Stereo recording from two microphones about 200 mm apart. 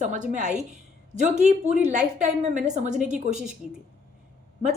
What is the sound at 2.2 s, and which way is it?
Speech, 35° right (ahead or behind).